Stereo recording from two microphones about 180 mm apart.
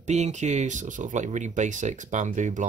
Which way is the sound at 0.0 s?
40° right (ahead or behind).